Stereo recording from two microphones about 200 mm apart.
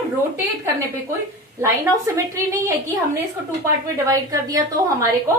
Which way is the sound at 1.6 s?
15° right (ahead or behind).